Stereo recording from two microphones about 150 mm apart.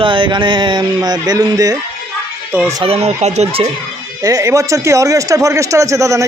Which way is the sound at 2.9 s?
45° right (ahead or behind).